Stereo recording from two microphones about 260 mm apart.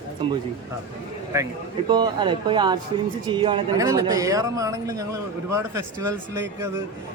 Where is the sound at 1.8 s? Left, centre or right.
Centre.